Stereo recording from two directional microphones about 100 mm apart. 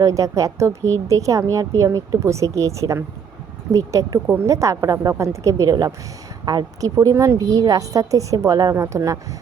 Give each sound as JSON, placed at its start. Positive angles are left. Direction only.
{"t": 0.0, "sound": "a woman's voice", "side_deg": -30}
{"t": 8.7, "sound": "speech", "side_deg": -25}